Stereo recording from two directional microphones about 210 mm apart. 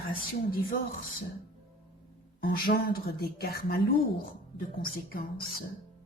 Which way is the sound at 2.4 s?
45° left (ahead or behind).